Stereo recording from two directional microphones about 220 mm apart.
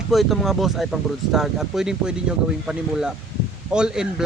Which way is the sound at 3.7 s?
5° right (ahead or behind).